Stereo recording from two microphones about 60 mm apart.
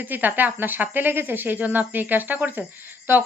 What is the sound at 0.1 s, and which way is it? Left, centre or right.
Speech, right.